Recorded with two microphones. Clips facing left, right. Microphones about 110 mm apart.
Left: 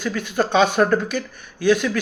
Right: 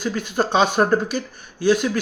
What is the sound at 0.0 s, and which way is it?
A man's voice, 40° right (ahead or behind).